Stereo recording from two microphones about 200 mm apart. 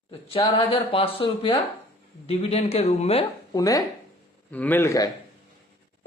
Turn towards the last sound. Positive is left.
turn(degrees=15)  # may be behind; listen again after turning